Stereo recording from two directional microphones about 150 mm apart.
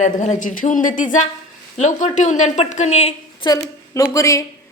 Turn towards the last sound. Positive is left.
turn(degrees=20)  # may be behind; listen again after turning